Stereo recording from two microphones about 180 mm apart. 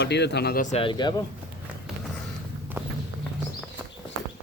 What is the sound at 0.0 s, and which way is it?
Speech, 70° left (ahead or behind).